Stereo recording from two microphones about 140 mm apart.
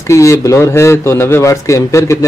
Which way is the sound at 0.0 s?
20° left (ahead or behind).